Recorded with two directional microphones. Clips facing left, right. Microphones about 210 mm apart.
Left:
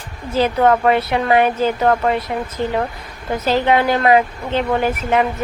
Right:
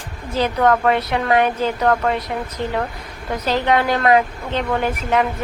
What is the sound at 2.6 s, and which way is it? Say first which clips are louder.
Speech: left 4 dB; 35° left (ahead or behind).